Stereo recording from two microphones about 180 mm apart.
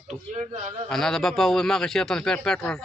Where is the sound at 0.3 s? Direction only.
40° right (ahead or behind).